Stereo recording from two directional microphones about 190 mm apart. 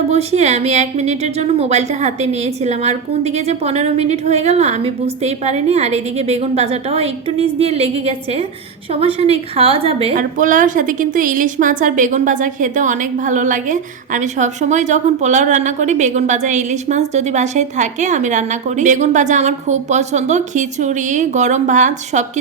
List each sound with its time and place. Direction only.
0.1 s a woman's voice: 35° right (ahead or behind)
10.2 s a woman's voice: 45° right (ahead or behind)